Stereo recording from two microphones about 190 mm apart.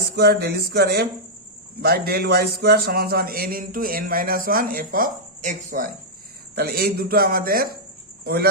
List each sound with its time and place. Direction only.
0.2 s a man's voice: 55° right (ahead or behind)
6.6 s a man's voice: 55° right (ahead or behind)